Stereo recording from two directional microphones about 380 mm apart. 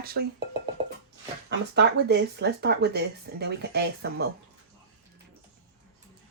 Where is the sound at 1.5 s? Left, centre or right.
Right.